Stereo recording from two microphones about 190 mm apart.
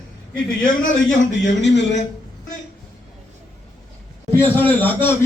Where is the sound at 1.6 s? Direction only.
70° left (ahead or behind).